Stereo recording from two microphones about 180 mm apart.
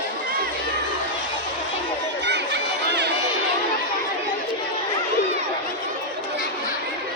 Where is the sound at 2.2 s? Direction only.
75° right (ahead or behind).